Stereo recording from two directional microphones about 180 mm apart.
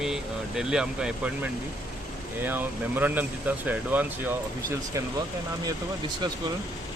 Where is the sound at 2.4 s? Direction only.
10° right (ahead or behind).